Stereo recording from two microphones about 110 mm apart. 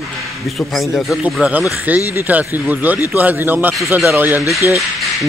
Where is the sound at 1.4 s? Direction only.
10° right (ahead or behind).